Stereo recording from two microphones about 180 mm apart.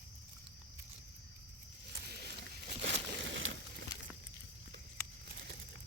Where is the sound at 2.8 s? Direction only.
85° right.